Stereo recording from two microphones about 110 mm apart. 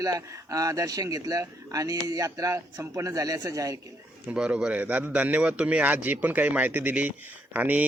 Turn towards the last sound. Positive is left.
turn(degrees=-15)  # may be behind; listen again after turning